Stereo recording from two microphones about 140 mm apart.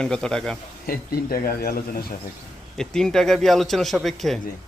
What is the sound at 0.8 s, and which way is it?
Speech, 90° left.